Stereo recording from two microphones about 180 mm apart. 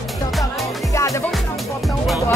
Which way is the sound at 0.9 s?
15° left (ahead or behind).